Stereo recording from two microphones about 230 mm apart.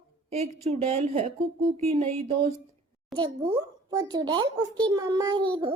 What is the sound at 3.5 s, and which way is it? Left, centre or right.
A woman's voice, centre.